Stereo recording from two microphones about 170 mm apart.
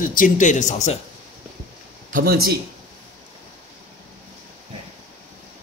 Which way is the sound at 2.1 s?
65° right (ahead or behind).